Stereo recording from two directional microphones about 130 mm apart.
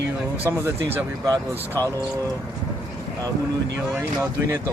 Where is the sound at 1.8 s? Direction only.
25° right (ahead or behind).